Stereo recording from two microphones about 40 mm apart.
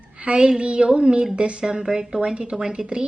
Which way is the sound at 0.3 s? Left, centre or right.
Right.